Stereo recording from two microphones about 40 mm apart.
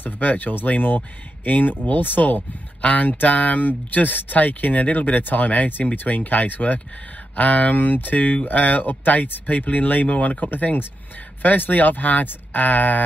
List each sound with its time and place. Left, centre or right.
0.0 s speech: left
2.8 s speech: left
10.6 s speech: left